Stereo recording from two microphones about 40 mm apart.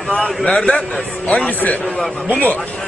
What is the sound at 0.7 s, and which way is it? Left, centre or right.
A man's voice, left.